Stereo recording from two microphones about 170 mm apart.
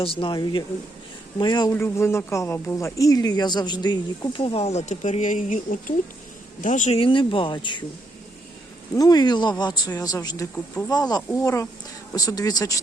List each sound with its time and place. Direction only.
0.0 s speech: 30° left (ahead or behind)
1.7 s speech: 15° left (ahead or behind); by 6.9 s 50° left (ahead or behind)
6.9 s speech: 30° left (ahead or behind)
9.0 s speech: 25° left (ahead or behind)